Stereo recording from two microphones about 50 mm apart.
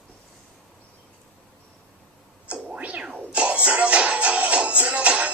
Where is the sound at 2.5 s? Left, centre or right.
Right.